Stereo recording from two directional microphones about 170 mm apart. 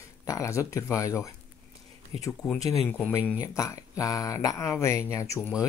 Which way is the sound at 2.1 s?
35° right (ahead or behind).